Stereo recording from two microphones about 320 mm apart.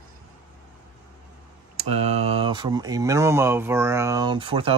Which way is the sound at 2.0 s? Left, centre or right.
Centre.